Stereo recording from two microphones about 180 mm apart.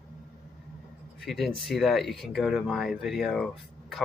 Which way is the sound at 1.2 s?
Centre (ahead or behind).